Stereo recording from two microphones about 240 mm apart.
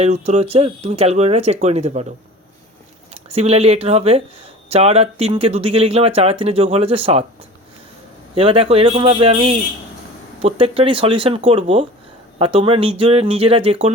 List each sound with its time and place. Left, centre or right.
0.0 s speech: right
3.3 s speech: right
8.4 s speech: right